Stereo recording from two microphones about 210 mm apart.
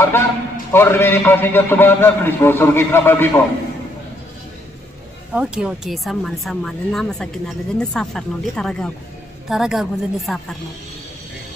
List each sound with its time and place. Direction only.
0.7 s a man's voice: 10° left (ahead or behind)
5.3 s speech: 5° right (ahead or behind)